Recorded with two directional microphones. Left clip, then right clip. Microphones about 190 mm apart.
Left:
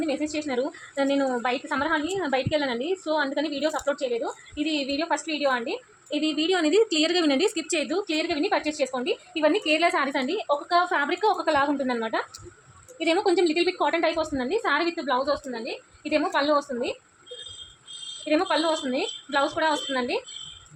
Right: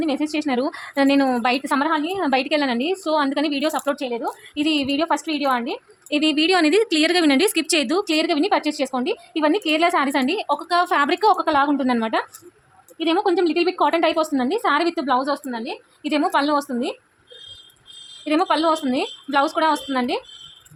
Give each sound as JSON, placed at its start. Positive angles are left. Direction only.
{"t": 0.0, "sound": "a woman's voice", "side_deg": -65}
{"t": 13.0, "sound": "a woman's voice", "side_deg": -40}
{"t": 18.3, "sound": "a woman's voice", "side_deg": -60}